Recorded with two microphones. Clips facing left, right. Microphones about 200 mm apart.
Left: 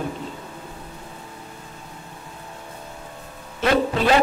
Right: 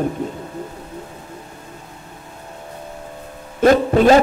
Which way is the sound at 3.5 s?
45° right (ahead or behind).